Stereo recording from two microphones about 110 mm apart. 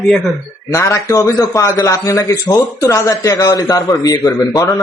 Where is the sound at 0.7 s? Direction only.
30° left (ahead or behind).